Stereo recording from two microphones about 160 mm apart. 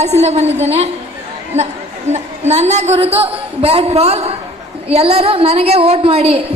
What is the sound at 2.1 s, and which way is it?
A woman's voice, 45° right (ahead or behind).